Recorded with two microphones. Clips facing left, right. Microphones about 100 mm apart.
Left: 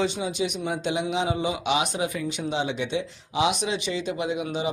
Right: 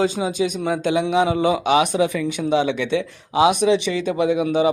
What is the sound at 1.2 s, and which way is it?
Speech, 65° right (ahead or behind).